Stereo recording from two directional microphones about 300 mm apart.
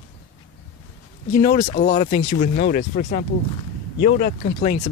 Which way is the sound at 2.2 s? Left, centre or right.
Left.